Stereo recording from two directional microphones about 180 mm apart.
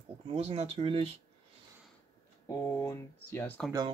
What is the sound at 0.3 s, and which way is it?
Speech, 35° right (ahead or behind).